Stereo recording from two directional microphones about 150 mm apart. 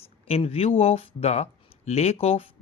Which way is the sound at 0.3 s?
40° left (ahead or behind).